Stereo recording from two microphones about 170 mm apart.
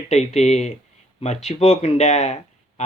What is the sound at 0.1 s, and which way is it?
Speech, 40° left (ahead or behind).